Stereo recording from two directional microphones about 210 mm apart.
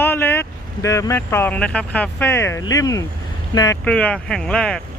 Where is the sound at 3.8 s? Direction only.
5° left (ahead or behind).